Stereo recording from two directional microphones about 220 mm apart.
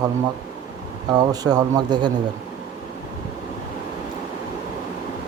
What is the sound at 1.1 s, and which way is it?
Speech, 20° right (ahead or behind).